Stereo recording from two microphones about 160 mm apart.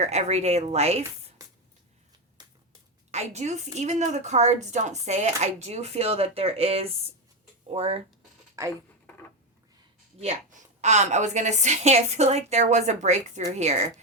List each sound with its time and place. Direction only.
0.0 s speech: 45° right (ahead or behind)
2.4 s a sound: 25° right (ahead or behind)
3.1 s a woman's voice: 45° right (ahead or behind)
8.6 s speech: 20° right (ahead or behind)
10.2 s speech: 45° right (ahead or behind)